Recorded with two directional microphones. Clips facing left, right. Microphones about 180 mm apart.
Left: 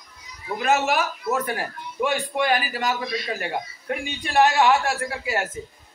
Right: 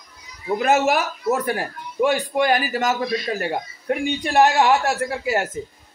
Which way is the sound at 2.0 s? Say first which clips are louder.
Right 4 dB; 40° right (ahead or behind).